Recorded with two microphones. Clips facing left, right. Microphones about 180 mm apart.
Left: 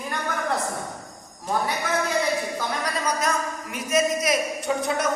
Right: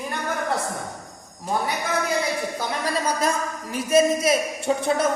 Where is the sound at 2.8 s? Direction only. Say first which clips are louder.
Right 4 dB; 30° right (ahead or behind).